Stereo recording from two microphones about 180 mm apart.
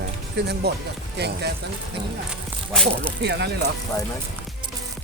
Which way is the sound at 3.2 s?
70° right (ahead or behind).